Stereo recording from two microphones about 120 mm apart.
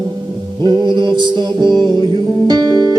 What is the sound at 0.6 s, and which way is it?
Music, 40° right (ahead or behind).